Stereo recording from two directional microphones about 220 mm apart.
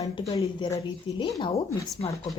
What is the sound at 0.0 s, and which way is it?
Speech, 20° left (ahead or behind).